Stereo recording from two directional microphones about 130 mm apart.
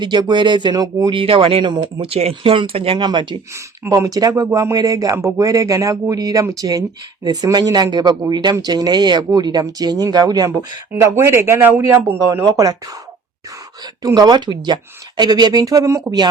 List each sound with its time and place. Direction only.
0.0 s speech: 35° right (ahead or behind)
1.1 s speech: 45° right (ahead or behind)
2.0 s speech: 50° right (ahead or behind)
3.0 s speech: 35° right (ahead or behind)
3.8 s speech: 25° right (ahead or behind)
11.0 s speech: 20° right (ahead or behind)
14.0 s speech: 30° right (ahead or behind)